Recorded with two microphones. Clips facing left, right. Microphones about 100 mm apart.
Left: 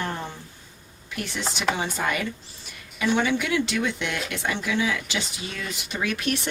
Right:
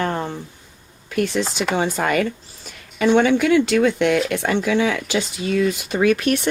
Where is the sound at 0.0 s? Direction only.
55° right (ahead or behind).